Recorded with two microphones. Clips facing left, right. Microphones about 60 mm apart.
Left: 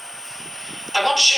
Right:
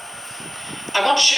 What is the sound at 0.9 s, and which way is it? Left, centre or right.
Speech, right.